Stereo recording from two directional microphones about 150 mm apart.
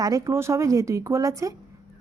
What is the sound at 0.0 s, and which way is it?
A woman's voice, 20° right (ahead or behind).